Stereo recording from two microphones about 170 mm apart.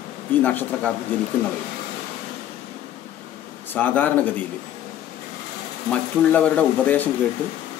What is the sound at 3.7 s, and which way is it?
Speech, 10° left (ahead or behind).